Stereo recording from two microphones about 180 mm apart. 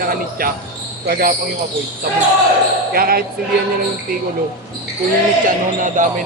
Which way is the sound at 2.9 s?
55° right (ahead or behind).